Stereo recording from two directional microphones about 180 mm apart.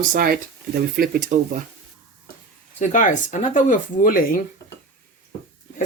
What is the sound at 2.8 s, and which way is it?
Speech, 45° left (ahead or behind).